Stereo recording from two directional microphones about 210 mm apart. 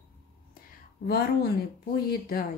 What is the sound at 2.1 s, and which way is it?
Speech, 45° left (ahead or behind).